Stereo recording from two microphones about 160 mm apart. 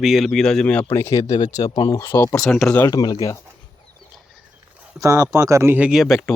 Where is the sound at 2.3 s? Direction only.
5° left (ahead or behind).